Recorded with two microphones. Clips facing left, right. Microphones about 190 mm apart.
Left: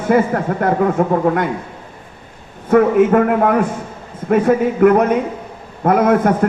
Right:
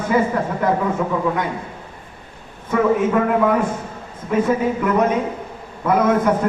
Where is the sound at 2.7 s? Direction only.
55° left (ahead or behind).